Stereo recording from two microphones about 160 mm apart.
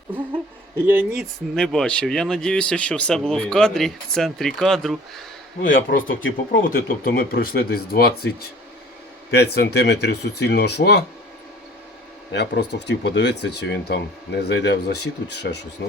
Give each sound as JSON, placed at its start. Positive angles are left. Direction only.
{"t": 0.9, "sound": "speech", "side_deg": -10}
{"t": 1.2, "sound": "speech", "side_deg": 5}
{"t": 6.0, "sound": "speech", "side_deg": 60}
{"t": 9.3, "sound": "speech", "side_deg": 90}
{"t": 12.3, "sound": "speech", "side_deg": 90}